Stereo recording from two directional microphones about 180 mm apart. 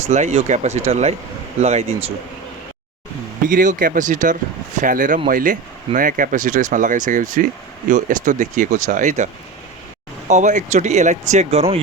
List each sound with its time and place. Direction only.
0.1 s speech: 40° right (ahead or behind)
3.5 s speech: 45° right (ahead or behind)